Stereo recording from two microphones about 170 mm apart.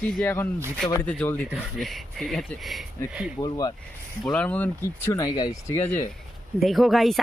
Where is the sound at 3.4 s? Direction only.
20° left (ahead or behind).